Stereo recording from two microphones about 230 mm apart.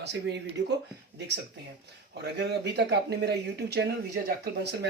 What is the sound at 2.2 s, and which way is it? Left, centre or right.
Speech, right.